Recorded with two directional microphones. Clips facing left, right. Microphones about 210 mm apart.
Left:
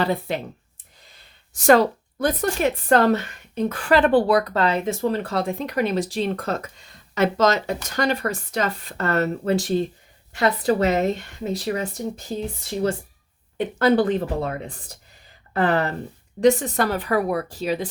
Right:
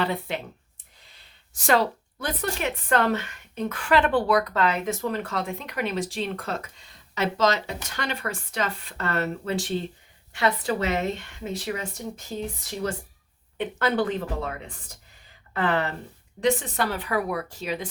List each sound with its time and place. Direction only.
0.0 s a woman's voice: 40° left (ahead or behind)